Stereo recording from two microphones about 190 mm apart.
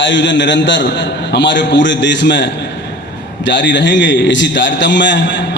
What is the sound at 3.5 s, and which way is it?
A man's voice, 70° left (ahead or behind).